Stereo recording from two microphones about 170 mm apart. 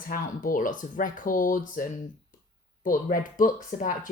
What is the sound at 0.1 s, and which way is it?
Speech, 55° left (ahead or behind).